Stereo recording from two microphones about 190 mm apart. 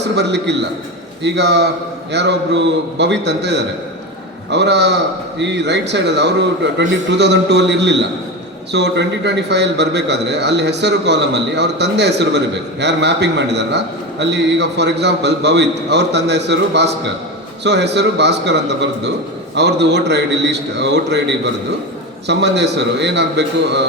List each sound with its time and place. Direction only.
0.2 s a man's voice: 65° right (ahead or behind)